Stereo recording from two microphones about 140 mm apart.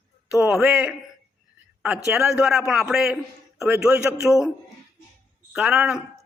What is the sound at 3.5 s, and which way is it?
Speech, 20° right (ahead or behind).